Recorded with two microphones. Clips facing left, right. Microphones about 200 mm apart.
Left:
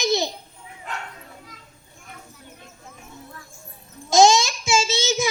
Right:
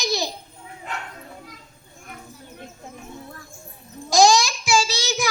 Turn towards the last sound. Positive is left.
turn(degrees=25)  # may be behind; listen again after turning